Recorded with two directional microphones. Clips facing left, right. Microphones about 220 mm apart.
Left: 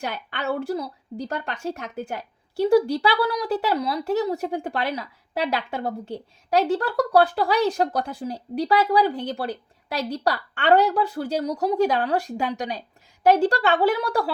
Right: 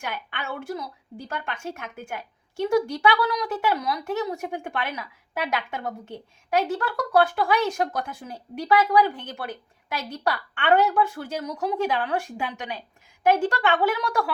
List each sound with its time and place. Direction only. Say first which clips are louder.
0.0 s a woman's voice: left 5 dB; 40° left (ahead or behind)